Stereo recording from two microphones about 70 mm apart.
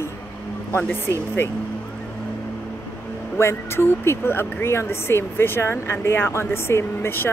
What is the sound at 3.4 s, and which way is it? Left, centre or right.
Speech, left.